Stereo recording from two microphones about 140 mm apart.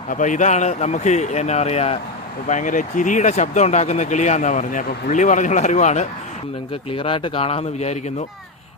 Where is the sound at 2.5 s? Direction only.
65° left (ahead or behind).